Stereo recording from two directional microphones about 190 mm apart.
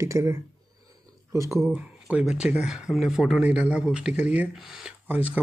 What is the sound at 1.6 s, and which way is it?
Speech, 5° right (ahead or behind).